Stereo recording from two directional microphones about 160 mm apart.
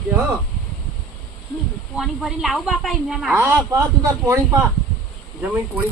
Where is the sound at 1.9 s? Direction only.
Centre (ahead or behind).